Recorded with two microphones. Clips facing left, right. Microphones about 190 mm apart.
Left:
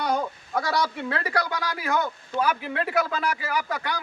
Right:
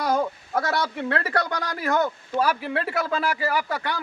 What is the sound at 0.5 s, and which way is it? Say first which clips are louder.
Speech: even; centre (ahead or behind).